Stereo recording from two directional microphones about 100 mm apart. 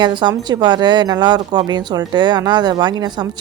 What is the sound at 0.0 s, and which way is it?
A woman's voice, 50° right (ahead or behind).